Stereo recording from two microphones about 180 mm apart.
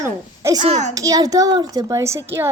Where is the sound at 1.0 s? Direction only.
20° right (ahead or behind).